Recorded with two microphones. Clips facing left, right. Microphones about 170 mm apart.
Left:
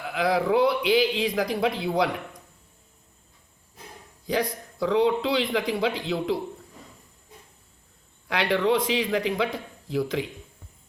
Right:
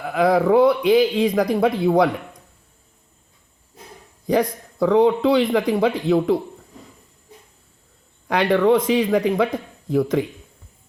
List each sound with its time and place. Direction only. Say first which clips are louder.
0.0 s a man's voice: right 7 dB; 50° right (ahead or behind)
4.3 s a man's voice: right 7 dB; 50° right (ahead or behind)
8.3 s a man's voice: right 6 dB; 50° right (ahead or behind)